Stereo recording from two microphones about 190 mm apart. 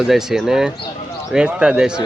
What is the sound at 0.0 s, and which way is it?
Speech, centre (ahead or behind).